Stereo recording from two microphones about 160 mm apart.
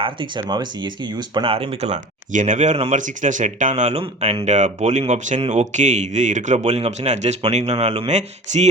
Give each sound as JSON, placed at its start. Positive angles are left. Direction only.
{"t": 0.0, "sound": "speech", "side_deg": -30}